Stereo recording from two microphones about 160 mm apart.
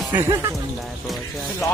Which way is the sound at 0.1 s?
15° right (ahead or behind).